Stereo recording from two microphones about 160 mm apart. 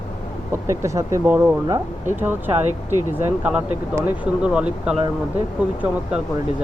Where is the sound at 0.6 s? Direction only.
20° right (ahead or behind).